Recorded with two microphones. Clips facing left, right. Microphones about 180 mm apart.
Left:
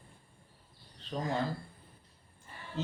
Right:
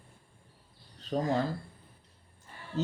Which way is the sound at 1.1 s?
50° right (ahead or behind).